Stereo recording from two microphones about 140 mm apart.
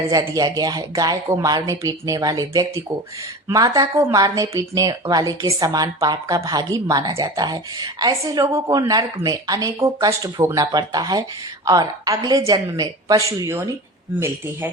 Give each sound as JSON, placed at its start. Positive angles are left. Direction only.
{"t": 0.1, "sound": "speech", "side_deg": -25}